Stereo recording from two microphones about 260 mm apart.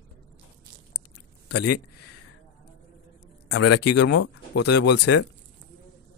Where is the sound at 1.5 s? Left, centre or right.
Left.